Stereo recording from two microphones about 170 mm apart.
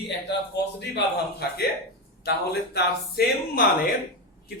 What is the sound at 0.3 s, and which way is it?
A man's voice, 85° left.